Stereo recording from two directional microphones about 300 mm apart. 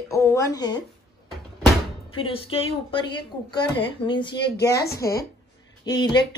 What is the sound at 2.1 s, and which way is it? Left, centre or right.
A woman's voice, centre.